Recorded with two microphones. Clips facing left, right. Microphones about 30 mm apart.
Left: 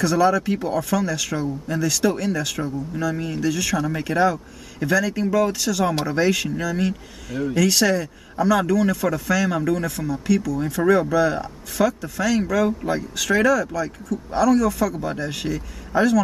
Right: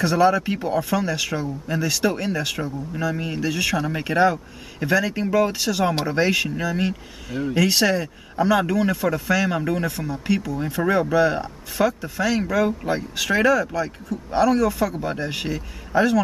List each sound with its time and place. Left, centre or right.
0.0 s speech: right